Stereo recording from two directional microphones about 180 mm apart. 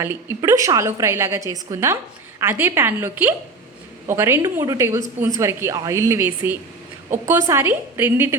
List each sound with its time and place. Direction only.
0.0 s a woman's voice: 10° right (ahead or behind)